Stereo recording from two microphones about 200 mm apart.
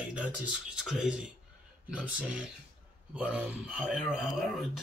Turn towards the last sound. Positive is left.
turn(degrees=0)  # may be behind; listen again after turning